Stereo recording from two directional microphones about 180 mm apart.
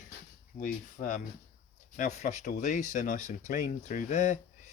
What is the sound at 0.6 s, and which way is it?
Speech, 45° left (ahead or behind).